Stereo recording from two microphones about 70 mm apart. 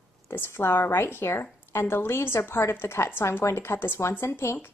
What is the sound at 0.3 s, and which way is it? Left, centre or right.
A woman's voice, left.